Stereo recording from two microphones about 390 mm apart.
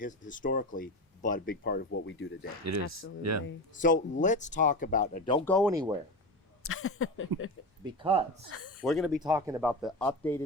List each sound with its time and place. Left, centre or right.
0.0 s speech: centre
2.6 s speech: right
3.8 s speech: centre
5.7 s speech: centre
6.6 s a sound: left
7.9 s speech: centre
8.4 s a sound: left
8.8 s speech: centre